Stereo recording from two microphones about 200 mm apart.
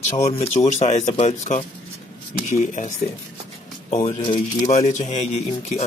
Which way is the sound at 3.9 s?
30° left (ahead or behind).